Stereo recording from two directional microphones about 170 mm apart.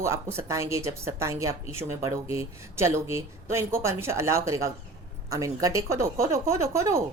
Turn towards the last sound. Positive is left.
turn(degrees=-15)  # may be behind; listen again after turning